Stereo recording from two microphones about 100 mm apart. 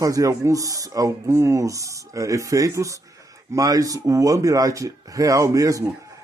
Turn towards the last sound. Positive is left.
turn(degrees=-35)  # may be behind; listen again after turning